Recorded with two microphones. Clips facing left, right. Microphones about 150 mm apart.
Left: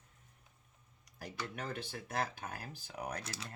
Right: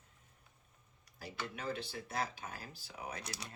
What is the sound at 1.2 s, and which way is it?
Speech, 55° left (ahead or behind).